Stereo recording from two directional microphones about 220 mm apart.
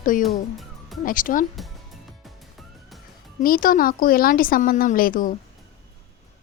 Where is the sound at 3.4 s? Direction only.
40° left (ahead or behind).